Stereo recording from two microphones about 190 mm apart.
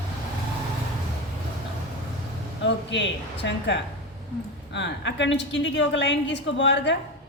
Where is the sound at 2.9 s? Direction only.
70° left (ahead or behind).